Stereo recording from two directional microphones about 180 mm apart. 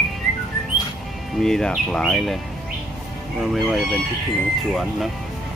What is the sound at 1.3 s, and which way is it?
Speech, centre (ahead or behind).